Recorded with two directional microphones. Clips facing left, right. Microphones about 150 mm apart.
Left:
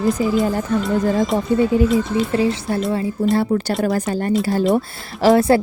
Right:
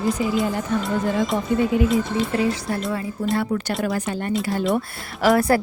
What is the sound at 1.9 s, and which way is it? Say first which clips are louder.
Speech: left 3 dB; 25° left (ahead or behind).